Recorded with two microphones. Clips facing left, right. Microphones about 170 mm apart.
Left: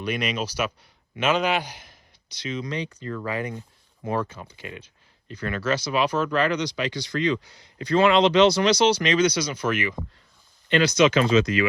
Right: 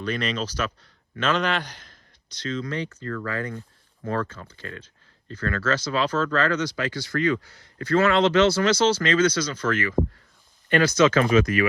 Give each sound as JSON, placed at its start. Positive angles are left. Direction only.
{"t": 0.0, "sound": "speech", "side_deg": 10}